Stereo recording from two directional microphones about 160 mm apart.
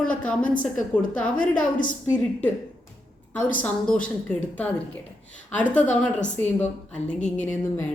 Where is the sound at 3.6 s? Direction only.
5° left (ahead or behind).